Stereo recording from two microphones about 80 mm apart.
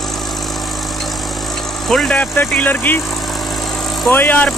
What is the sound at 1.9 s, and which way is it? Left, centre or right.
Speech, centre.